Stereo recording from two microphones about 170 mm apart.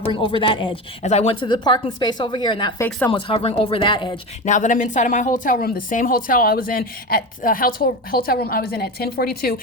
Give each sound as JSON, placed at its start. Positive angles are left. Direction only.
{"t": 0.0, "sound": "speech", "side_deg": 30}
{"t": 4.4, "sound": "a woman's voice", "side_deg": 45}